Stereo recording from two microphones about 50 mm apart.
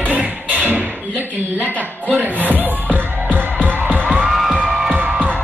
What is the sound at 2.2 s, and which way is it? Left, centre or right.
Music, right.